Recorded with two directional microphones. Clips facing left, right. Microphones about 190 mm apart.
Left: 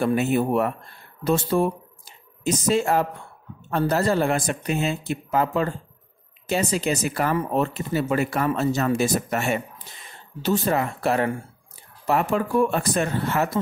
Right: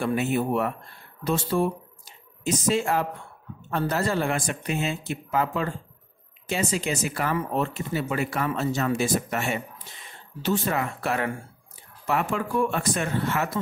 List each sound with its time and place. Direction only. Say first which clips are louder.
0.0 s speech: left 4 dB; 40° left (ahead or behind)